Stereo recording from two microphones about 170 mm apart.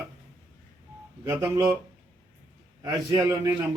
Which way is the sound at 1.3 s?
15° right (ahead or behind).